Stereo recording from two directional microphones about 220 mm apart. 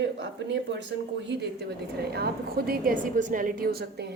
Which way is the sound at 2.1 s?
45° right (ahead or behind).